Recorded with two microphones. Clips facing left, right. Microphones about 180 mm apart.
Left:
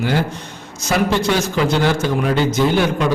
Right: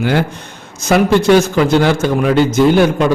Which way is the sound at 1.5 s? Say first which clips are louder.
Right 5 dB; 55° right (ahead or behind).